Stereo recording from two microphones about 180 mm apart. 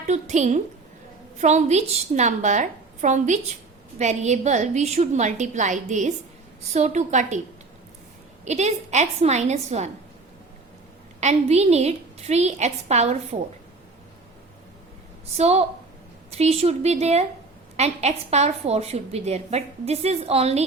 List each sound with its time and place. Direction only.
0.1 s a woman's voice: 40° right (ahead or behind)
8.4 s a woman's voice: 40° right (ahead or behind)
11.2 s a woman's voice: 40° right (ahead or behind)
15.4 s a woman's voice: 35° right (ahead or behind)